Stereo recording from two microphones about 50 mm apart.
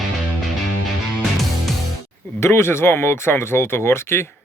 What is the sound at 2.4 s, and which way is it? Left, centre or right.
Speech, left.